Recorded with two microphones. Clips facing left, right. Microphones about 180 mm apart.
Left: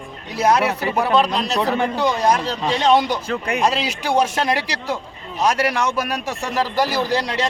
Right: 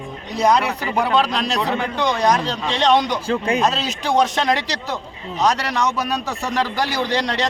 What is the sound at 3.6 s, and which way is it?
A man's voice, 10° left (ahead or behind).